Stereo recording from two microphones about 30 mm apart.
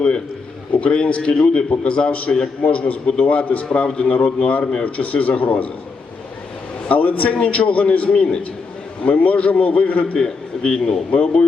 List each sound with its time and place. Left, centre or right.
0.7 s a man's voice: left
1.8 s a man's voice: left
4.9 s a man's voice: left
6.8 s a man's voice: left
9.1 s a man's voice: left
10.2 s a man's voice: left
11.1 s a man's voice: left